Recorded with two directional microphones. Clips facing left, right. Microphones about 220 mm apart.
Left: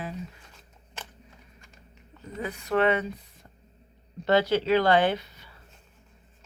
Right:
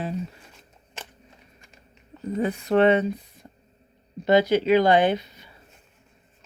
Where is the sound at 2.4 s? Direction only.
30° right (ahead or behind).